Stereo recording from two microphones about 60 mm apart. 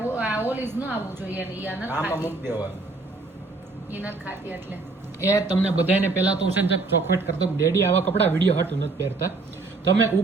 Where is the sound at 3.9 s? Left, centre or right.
Right.